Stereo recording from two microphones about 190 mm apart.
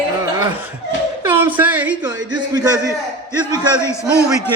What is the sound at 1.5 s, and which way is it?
Speech, 10° right (ahead or behind).